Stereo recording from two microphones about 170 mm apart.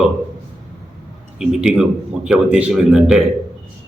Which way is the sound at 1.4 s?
5° right (ahead or behind).